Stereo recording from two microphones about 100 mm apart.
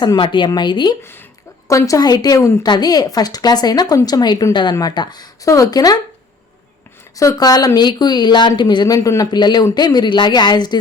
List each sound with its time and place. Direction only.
0.2 s speech: 55° left (ahead or behind)
1.6 s speech: 35° left (ahead or behind)
7.2 s speech: 35° left (ahead or behind)